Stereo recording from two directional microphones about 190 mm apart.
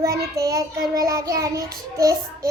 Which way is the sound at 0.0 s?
15° right (ahead or behind).